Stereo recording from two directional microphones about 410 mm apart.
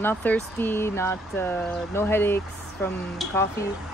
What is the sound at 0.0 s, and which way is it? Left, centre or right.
Speech, centre.